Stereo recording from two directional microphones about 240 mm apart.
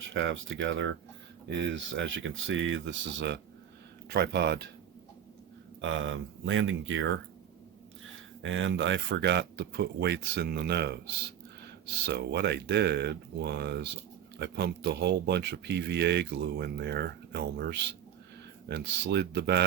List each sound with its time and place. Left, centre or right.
0.1 s speech: right
5.8 s speech: right
8.4 s speech: right
12.0 s speech: right